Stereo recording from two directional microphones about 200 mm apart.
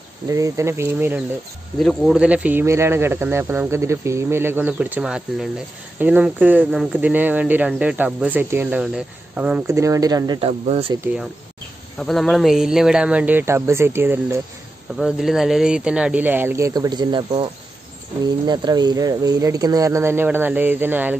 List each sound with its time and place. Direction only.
0.3 s speech: 15° right (ahead or behind)
1.8 s speech: centre (ahead or behind); by 11.0 s 30° right (ahead or behind)
12.0 s speech: centre (ahead or behind)